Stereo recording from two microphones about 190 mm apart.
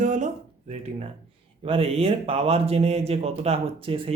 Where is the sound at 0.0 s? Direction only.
40° right (ahead or behind).